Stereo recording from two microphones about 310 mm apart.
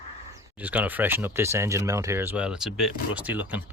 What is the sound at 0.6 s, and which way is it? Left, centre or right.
Speech, centre.